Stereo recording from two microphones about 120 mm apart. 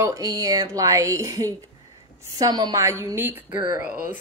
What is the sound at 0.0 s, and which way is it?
Speech, 30° right (ahead or behind).